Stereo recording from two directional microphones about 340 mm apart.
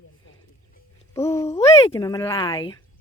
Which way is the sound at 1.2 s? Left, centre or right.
Centre.